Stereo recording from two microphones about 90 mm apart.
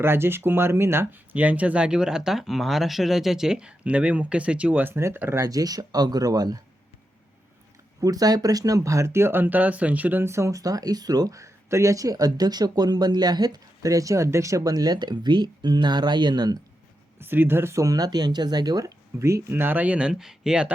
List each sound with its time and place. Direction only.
0.0 s speech: 25° right (ahead or behind)
5.5 s speech: 45° right (ahead or behind)
8.0 s speech: 45° right (ahead or behind)
17.2 s speech: 25° right (ahead or behind); by 18.9 s 50° right (ahead or behind)
19.2 s speech: 30° right (ahead or behind); by 20.7 s 10° right (ahead or behind)